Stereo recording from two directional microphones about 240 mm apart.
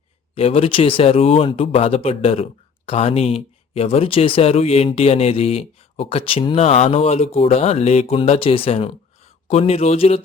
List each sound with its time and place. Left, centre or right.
0.3 s a man's voice: left